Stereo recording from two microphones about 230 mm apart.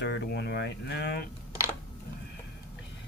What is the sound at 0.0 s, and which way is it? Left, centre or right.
Speech, left.